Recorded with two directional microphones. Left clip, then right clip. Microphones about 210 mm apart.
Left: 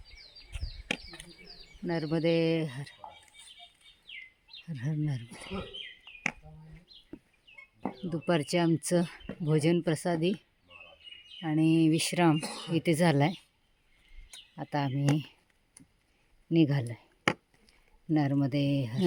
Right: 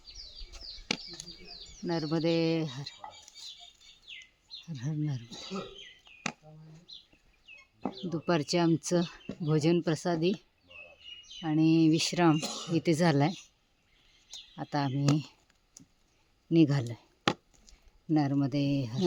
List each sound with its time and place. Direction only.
1.9 s speech: 10° left (ahead or behind)
4.6 s speech: 10° left (ahead or behind)
5.3 s speech: 35° left (ahead or behind)
7.8 s chicken: 30° left (ahead or behind)
8.1 s speech: 10° left (ahead or behind)
14.3 s a sound: 5° left (ahead or behind)
15.1 s speech: centre (ahead or behind)
16.5 s speech: centre (ahead or behind)
18.1 s speech: 10° left (ahead or behind)